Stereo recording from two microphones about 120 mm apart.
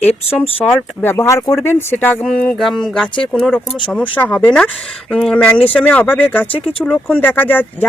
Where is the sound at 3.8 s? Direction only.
10° left (ahead or behind).